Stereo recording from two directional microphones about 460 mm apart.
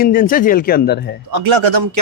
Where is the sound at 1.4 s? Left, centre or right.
Right.